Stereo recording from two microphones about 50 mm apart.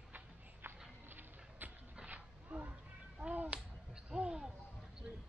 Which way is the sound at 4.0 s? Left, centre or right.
Centre.